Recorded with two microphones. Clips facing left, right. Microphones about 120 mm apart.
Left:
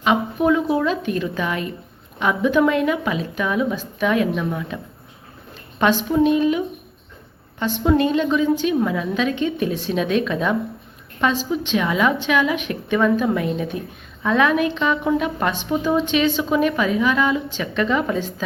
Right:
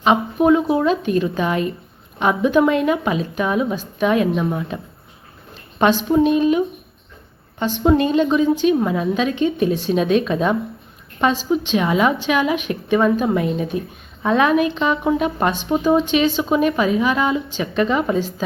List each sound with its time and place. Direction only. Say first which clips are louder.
0.0 s a woman's voice: right 3 dB; 25° right (ahead or behind)
5.8 s a woman's voice: right 2 dB; 20° right (ahead or behind)
7.9 s a woman's voice: right 2 dB; 25° right (ahead or behind)